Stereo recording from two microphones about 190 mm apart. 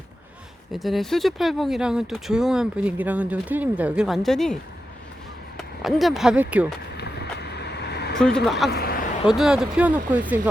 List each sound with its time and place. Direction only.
0.7 s speech: centre (ahead or behind)
5.5 s speech: centre (ahead or behind)
6.9 s vehicle: 60° left (ahead or behind)
8.2 s speech: 5° left (ahead or behind)
8.7 s a sound: 55° left (ahead or behind)
9.2 s speech: 5° right (ahead or behind)